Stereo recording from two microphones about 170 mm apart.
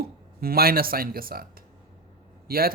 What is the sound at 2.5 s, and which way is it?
Speech, 60° right (ahead or behind).